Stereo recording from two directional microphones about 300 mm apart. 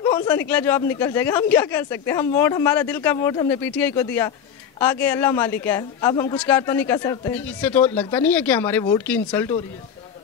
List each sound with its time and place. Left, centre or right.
0.0 s a man's voice: centre